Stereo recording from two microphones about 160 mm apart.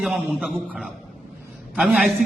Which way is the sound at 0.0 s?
5° right (ahead or behind).